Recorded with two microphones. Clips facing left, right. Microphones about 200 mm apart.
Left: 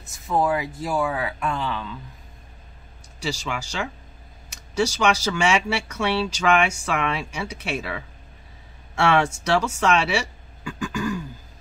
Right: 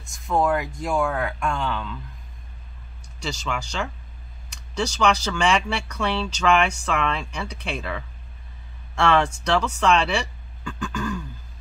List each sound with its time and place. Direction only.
0.1 s speech: 5° left (ahead or behind)
3.2 s speech: 10° left (ahead or behind)